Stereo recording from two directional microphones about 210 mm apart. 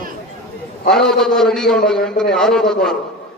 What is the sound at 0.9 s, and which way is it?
A man's voice, centre (ahead or behind).